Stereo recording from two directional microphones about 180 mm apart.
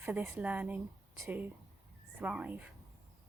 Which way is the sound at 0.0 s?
10° right (ahead or behind).